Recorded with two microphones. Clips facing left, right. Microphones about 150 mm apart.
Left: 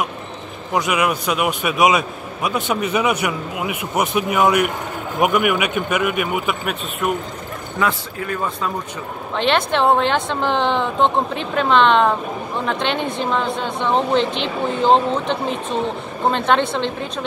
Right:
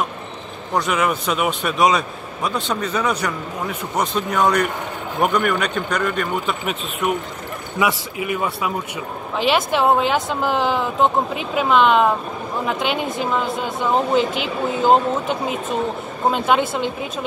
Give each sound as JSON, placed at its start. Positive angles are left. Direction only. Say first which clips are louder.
{"t": 0.7, "sound": "a man's voice", "louder": "left 1 dB", "side_deg": 0}
{"t": 7.8, "sound": "a woman's voice", "louder": "right 1 dB", "side_deg": -10}